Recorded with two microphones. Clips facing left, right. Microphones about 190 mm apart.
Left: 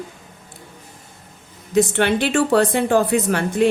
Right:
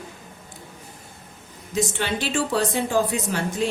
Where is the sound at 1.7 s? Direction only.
60° left (ahead or behind).